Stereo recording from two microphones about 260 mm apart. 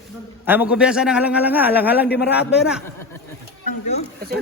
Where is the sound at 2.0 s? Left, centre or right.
Left.